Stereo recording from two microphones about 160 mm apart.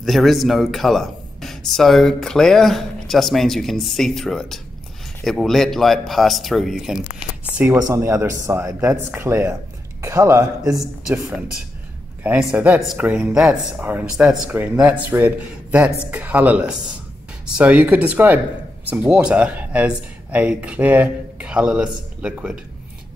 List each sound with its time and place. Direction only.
0.0 s speech: centre (ahead or behind)
7.5 s speech: 15° right (ahead or behind)
11.1 s speech: 5° right (ahead or behind)